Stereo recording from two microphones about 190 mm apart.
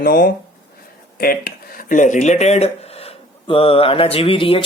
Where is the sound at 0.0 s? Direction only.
50° left (ahead or behind).